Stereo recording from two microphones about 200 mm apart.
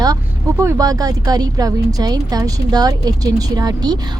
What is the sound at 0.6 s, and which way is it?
Speech, 15° right (ahead or behind).